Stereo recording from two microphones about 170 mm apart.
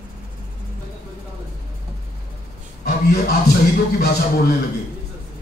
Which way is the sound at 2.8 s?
70° left (ahead or behind).